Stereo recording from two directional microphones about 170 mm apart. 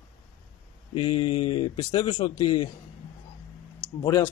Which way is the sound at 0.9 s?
30° left (ahead or behind).